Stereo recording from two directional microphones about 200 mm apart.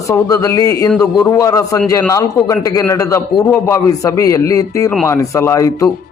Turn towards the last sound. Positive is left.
turn(degrees=15)  # may be behind; listen again after turning